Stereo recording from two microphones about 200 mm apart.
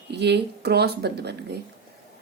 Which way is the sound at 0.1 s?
55° right (ahead or behind).